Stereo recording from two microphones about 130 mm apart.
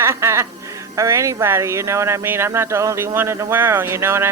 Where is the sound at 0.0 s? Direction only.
20° right (ahead or behind).